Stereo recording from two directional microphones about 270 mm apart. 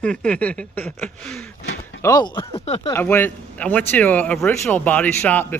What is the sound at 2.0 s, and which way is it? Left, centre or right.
Speech, centre.